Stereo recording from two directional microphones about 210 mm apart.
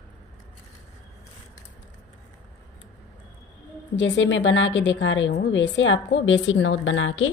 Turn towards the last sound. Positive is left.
turn(degrees=70)  # may be behind; listen again after turning